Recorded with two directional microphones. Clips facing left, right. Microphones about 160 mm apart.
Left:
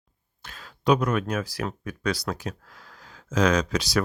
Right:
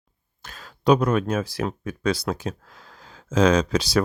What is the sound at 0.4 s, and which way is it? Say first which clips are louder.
Speech: right 3 dB; 40° right (ahead or behind).